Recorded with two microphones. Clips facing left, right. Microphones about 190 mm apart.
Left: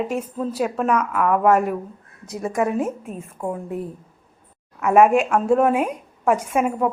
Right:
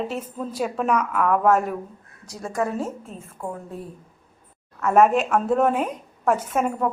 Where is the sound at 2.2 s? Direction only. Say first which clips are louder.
Left 4 dB; 20° left (ahead or behind).